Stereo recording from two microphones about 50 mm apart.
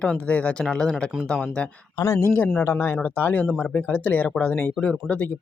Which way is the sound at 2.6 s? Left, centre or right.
Left.